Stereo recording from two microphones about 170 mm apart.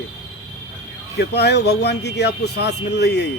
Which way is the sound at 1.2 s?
80° left.